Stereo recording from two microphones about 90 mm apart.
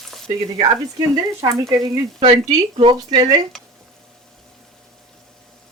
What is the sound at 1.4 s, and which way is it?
Speech, 40° right (ahead or behind).